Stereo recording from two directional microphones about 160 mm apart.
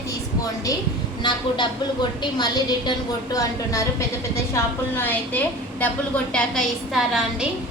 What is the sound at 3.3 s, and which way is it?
A woman's voice, 20° left (ahead or behind).